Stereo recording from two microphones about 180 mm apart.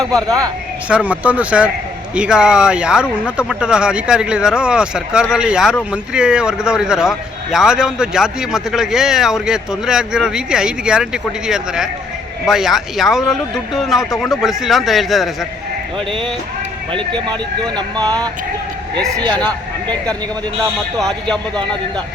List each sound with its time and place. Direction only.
0.0 s speech: centre (ahead or behind)
16.9 s speech: 25° right (ahead or behind)
18.9 s speech: 5° left (ahead or behind)
21.0 s speech: 5° left (ahead or behind)